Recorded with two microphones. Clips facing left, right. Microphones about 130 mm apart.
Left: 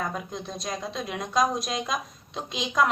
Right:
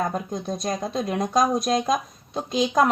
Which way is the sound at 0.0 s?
40° right (ahead or behind).